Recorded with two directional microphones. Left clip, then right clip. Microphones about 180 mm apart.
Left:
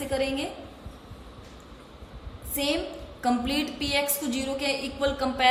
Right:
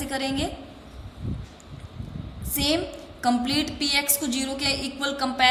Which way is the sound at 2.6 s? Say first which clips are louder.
Right 3 dB; 25° right (ahead or behind).